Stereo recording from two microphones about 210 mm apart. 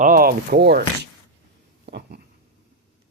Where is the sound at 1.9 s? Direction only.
50° right (ahead or behind).